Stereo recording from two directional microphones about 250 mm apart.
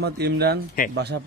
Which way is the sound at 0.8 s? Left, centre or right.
Left.